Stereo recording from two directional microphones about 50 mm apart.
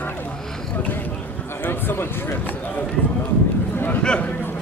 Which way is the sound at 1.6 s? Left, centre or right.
Left.